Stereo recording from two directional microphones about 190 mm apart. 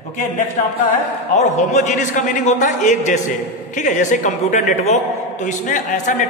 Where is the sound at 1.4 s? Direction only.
40° left (ahead or behind).